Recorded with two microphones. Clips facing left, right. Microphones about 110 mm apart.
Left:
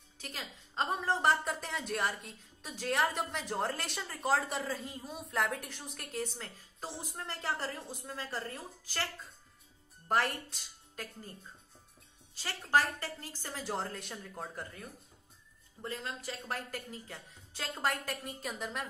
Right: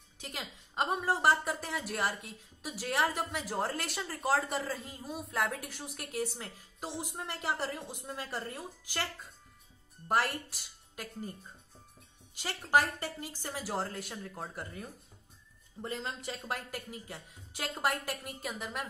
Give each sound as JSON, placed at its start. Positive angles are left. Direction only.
{"t": 0.2, "sound": "a woman's voice", "side_deg": -15}
{"t": 12.4, "sound": "a woman's voice", "side_deg": -15}
{"t": 15.8, "sound": "speech", "side_deg": -20}
{"t": 16.7, "sound": "a woman's voice", "side_deg": -10}